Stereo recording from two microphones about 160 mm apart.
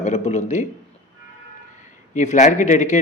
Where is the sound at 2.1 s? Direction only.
50° left (ahead or behind).